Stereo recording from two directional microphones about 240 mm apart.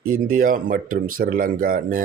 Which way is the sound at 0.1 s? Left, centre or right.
Right.